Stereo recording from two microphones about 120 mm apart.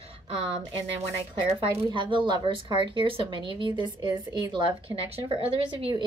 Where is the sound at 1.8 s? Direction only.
40° right (ahead or behind).